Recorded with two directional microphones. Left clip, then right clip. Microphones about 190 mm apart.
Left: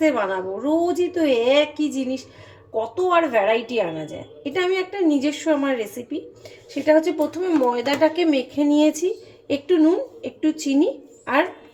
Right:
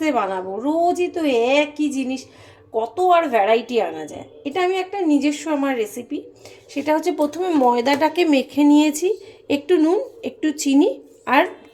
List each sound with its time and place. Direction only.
0.0 s a woman's voice: 20° right (ahead or behind); by 10.8 s 40° right (ahead or behind)